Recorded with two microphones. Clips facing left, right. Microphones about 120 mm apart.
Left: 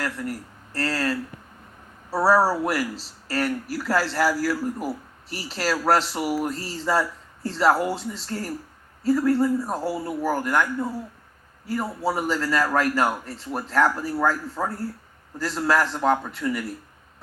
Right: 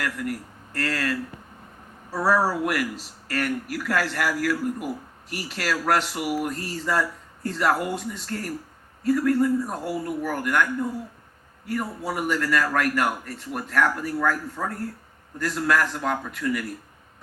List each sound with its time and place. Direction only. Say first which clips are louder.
0.0 s speech: even; 35° left (ahead or behind)
2.3 s a man's voice: left 2 dB; 35° left (ahead or behind)
11.7 s a man's voice: left 3 dB; 30° left (ahead or behind)